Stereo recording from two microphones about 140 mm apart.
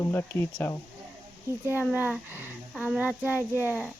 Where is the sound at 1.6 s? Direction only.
15° right (ahead or behind).